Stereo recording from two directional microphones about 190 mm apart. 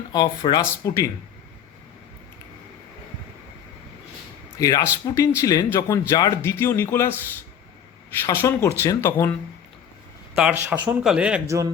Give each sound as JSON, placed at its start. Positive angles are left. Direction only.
{"t": 0.1, "sound": "speech", "side_deg": 20}
{"t": 4.5, "sound": "speech", "side_deg": 15}
{"t": 8.3, "sound": "speech", "side_deg": 15}
{"t": 10.3, "sound": "speech", "side_deg": -5}